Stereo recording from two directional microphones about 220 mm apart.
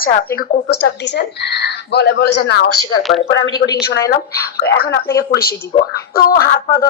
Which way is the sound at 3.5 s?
15° left (ahead or behind).